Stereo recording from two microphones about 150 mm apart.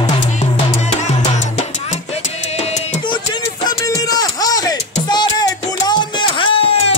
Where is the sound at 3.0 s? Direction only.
30° left (ahead or behind).